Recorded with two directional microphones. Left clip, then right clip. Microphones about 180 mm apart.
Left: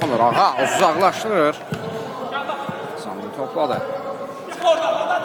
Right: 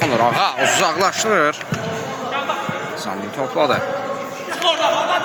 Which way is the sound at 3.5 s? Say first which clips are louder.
Right 4 dB; 5° right (ahead or behind).